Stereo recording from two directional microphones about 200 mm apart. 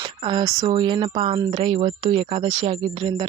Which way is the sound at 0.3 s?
20° right (ahead or behind).